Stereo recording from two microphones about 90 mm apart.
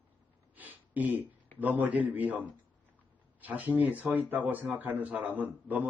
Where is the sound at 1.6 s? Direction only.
20° right (ahead or behind).